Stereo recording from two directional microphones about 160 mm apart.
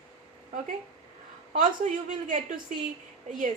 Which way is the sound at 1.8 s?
50° right (ahead or behind).